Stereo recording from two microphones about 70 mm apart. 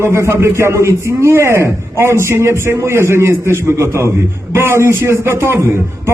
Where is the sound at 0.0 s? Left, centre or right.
Right.